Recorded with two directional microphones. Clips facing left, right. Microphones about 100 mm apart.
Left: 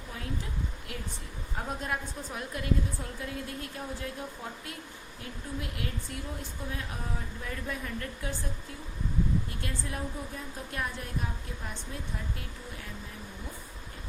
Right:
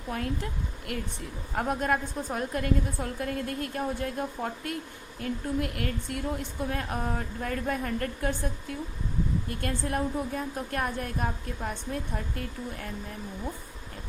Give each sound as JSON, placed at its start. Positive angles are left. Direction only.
{"t": 0.1, "sound": "a woman's voice", "side_deg": -65}
{"t": 1.5, "sound": "a woman's voice", "side_deg": -55}
{"t": 9.5, "sound": "a woman's voice", "side_deg": -55}